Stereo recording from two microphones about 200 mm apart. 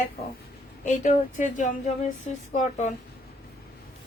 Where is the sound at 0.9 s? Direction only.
40° left (ahead or behind).